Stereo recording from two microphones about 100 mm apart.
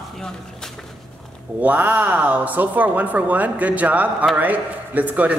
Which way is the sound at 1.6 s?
15° right (ahead or behind).